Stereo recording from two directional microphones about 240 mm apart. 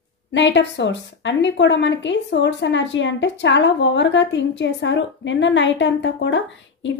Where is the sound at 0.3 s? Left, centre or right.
Left.